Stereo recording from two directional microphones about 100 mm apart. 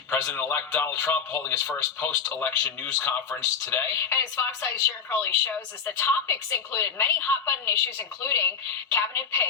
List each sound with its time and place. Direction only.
0.3 s speech: 15° left (ahead or behind)